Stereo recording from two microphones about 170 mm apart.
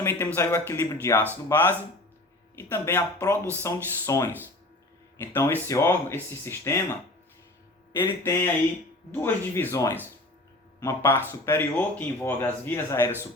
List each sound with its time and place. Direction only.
0.0 s a man's voice: 15° left (ahead or behind)
7.9 s speech: 15° left (ahead or behind)